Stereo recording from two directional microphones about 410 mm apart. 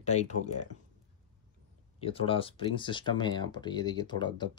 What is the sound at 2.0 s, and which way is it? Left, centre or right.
Speech, centre.